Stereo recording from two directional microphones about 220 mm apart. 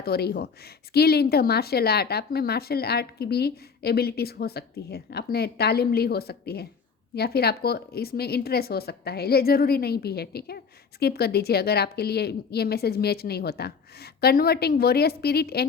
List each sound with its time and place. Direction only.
0.0 s speech: 45° left (ahead or behind)